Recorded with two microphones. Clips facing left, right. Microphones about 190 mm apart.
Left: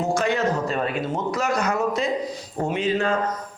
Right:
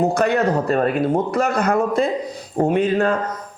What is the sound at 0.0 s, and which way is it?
Speech, 60° right (ahead or behind).